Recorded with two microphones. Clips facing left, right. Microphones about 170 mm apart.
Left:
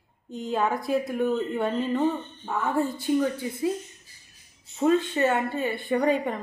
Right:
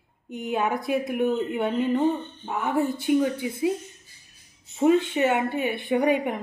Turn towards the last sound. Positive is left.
turn(degrees=-15)  # may be behind; listen again after turning